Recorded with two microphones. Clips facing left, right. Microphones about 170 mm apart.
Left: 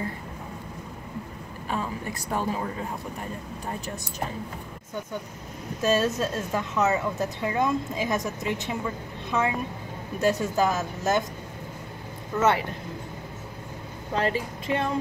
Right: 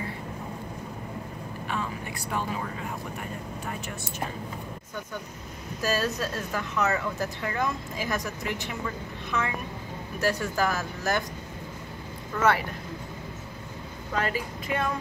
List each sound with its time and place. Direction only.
1.7 s speech: 35° left (ahead or behind)
5.8 s speech: 25° left (ahead or behind)
12.4 s speech: 25° left (ahead or behind)
14.1 s speech: 25° left (ahead or behind)